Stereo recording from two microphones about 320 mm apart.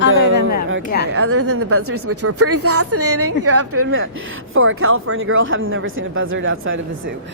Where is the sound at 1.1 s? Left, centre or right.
Right.